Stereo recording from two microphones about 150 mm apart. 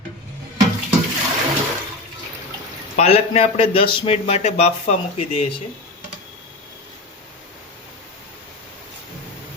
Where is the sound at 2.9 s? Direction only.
45° left (ahead or behind).